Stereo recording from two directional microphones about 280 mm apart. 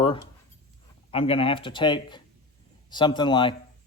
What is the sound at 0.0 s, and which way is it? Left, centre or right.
Writing, centre.